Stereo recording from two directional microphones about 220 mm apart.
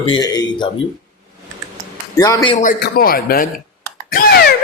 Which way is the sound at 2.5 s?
35° left (ahead or behind).